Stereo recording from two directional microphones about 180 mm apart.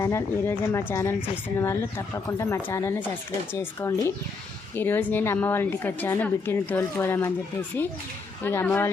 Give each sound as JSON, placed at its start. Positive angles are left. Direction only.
{"t": 0.0, "sound": "a woman's voice", "side_deg": 15}
{"t": 8.4, "sound": "a woman's voice", "side_deg": 10}